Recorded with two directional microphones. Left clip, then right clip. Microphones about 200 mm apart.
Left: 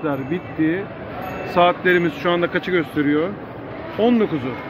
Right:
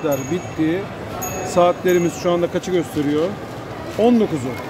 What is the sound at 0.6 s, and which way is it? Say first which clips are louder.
Speech: left 1 dB; centre (ahead or behind).